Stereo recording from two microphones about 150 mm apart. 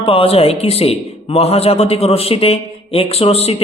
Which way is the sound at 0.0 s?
40° left (ahead or behind).